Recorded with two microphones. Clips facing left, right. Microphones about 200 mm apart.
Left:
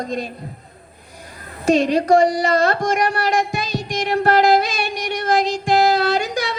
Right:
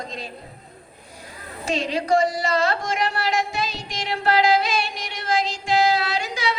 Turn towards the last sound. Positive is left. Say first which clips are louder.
# left 5 dB
turn(degrees=45)  # may be behind; listen again after turning